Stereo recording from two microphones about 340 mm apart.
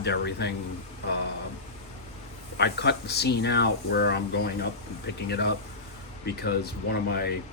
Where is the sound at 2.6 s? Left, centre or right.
Left.